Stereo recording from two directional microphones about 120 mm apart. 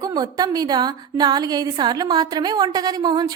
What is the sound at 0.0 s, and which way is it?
A woman's voice, 30° right (ahead or behind).